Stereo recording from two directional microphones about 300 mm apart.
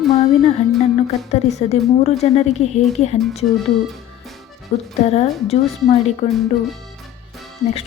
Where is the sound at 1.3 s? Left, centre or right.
Left.